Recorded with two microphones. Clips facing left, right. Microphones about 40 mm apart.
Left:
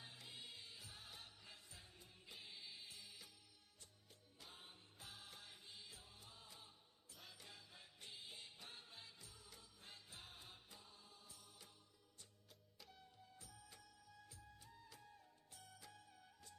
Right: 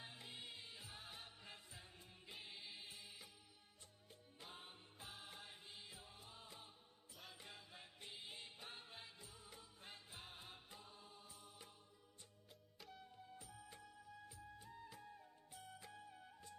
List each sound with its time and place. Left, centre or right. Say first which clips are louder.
0.0 s music: right 2 dB; centre
4.5 s music: right 4 dB; right
13.0 s music: right 5 dB; right